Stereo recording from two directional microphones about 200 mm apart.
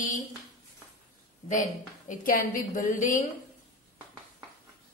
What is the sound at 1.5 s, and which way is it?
A woman's voice, 40° left (ahead or behind).